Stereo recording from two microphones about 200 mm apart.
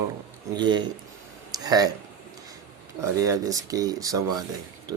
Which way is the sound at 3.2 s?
15° right (ahead or behind).